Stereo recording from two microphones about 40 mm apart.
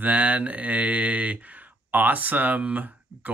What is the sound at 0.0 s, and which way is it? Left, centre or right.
Speech, right.